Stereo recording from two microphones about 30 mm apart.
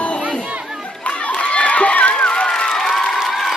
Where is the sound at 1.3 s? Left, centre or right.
Left.